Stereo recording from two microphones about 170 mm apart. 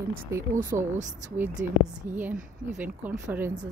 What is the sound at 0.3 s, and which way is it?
Speech, 20° right (ahead or behind).